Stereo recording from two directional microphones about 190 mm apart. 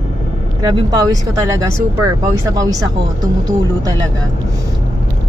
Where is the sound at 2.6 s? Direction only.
20° right (ahead or behind).